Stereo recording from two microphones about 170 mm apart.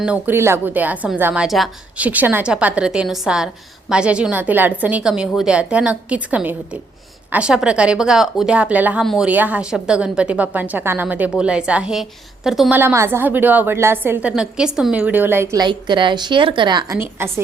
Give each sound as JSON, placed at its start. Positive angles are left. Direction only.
{"t": 0.0, "sound": "a woman's voice", "side_deg": -10}
{"t": 15.6, "sound": "a woman's voice", "side_deg": -30}
{"t": 17.0, "sound": "a woman's voice", "side_deg": -15}